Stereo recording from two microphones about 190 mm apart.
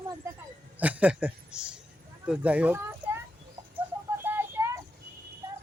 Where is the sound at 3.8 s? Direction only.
10° right (ahead or behind).